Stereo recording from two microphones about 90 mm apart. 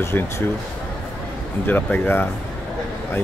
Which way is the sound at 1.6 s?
20° left (ahead or behind).